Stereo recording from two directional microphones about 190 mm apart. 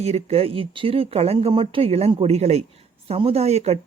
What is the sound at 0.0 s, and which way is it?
Speech, 30° right (ahead or behind).